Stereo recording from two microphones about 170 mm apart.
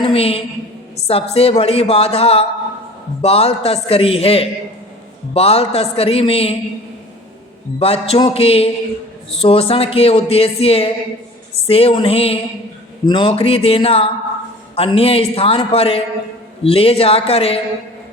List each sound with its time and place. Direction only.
0.0 s speech: 35° left (ahead or behind)
7.8 s speech: 35° left (ahead or behind)